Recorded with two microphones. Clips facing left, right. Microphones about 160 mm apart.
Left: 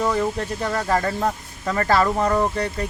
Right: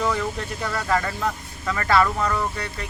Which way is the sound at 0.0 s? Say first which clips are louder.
Left 3 dB; 25° left (ahead or behind).